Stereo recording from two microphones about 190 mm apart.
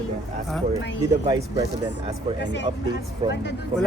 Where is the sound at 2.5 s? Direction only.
70° left (ahead or behind).